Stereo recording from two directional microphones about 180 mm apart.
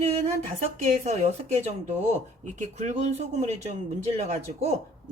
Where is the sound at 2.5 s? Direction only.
40° right (ahead or behind).